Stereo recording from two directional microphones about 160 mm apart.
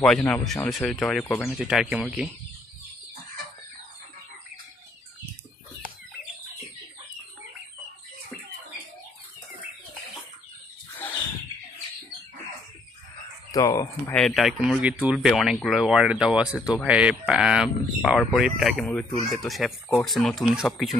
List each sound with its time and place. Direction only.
0.0 s speech: 5° left (ahead or behind)
1.2 s speech: 15° left (ahead or behind)
1.6 s speech: 5° right (ahead or behind)
10.9 s horse: 10° left (ahead or behind)
13.5 s speech: 20° left (ahead or behind)
14.1 s speech: centre (ahead or behind)